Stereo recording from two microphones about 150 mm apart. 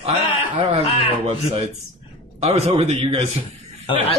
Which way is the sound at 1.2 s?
45° right (ahead or behind).